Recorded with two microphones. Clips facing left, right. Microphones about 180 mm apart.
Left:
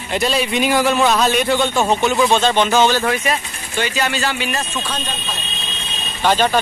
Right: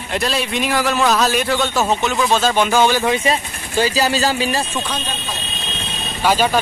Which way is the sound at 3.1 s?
25° right (ahead or behind).